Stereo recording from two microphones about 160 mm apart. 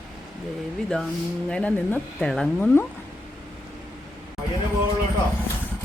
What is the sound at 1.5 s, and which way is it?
Speech, 10° left (ahead or behind).